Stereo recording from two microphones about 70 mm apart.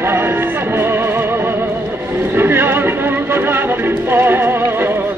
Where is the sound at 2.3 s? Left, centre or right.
Right.